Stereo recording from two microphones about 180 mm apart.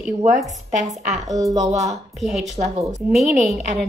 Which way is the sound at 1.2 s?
20° right (ahead or behind).